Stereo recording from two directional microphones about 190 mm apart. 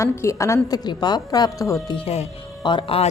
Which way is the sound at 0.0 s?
15° left (ahead or behind).